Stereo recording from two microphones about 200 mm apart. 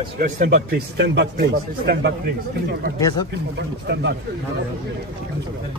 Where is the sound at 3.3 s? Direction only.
60° right (ahead or behind).